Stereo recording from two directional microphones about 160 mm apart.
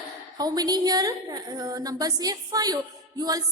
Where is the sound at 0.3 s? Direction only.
25° right (ahead or behind).